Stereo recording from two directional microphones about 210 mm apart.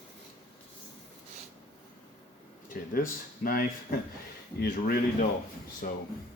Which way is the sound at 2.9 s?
45° left (ahead or behind).